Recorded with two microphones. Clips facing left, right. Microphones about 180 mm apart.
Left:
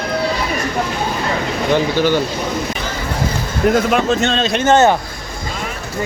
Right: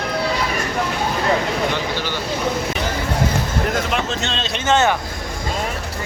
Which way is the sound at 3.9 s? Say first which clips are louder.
Left 8 dB; 50° left (ahead or behind).